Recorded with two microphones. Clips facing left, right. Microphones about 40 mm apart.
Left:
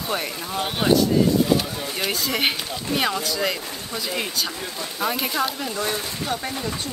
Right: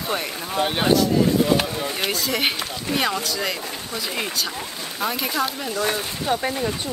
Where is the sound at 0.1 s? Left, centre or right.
Centre.